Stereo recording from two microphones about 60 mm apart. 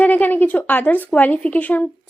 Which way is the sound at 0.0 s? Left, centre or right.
Left.